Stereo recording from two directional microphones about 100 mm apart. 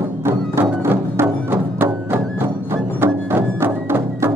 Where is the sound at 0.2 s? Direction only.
25° right (ahead or behind).